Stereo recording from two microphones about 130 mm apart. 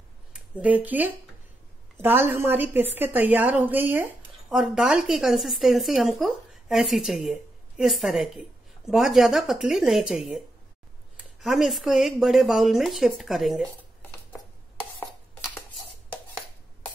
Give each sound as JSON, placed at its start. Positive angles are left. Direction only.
{"t": 0.3, "sound": "a woman's voice", "side_deg": -10}
{"t": 4.5, "sound": "speech", "side_deg": -5}
{"t": 11.4, "sound": "speech", "side_deg": 0}